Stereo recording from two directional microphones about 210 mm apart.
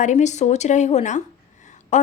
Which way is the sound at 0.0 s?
35° left (ahead or behind).